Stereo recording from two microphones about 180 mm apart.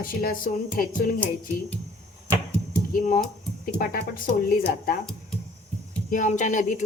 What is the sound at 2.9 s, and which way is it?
Speech, 50° left (ahead or behind).